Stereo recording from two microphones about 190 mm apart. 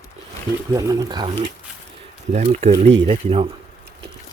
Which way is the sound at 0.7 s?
15° right (ahead or behind).